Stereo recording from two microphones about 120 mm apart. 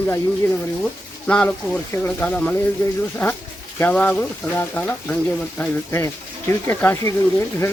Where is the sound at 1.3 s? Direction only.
10° left (ahead or behind).